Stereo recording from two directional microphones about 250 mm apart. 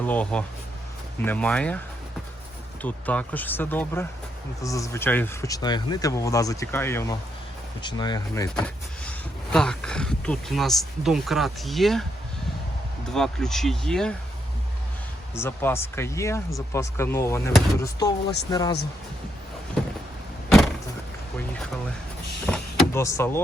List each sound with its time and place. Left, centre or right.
0.0 s speech: centre
2.8 s speech: centre
8.6 s speech: centre
13.1 s speech: centre
15.4 s speech: centre
22.4 s power windows: centre